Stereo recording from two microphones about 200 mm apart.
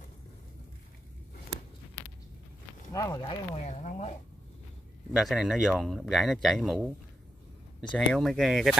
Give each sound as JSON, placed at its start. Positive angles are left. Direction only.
{"t": 2.9, "sound": "speech", "side_deg": 15}
{"t": 5.1, "sound": "speech", "side_deg": 0}
{"t": 7.9, "sound": "speech", "side_deg": 0}